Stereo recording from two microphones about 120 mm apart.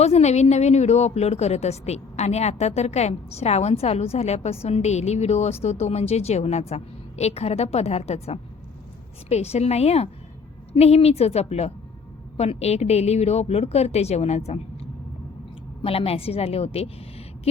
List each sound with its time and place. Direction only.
0.0 s a woman's voice: 65° left (ahead or behind)